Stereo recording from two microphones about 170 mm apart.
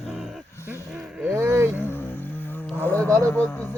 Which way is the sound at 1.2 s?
15° right (ahead or behind).